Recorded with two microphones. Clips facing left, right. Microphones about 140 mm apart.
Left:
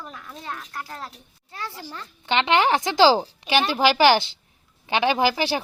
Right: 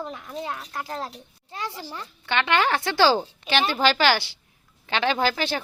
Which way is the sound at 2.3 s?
20° left (ahead or behind).